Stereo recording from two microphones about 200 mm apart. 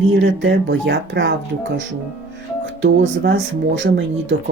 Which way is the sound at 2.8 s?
65° right (ahead or behind).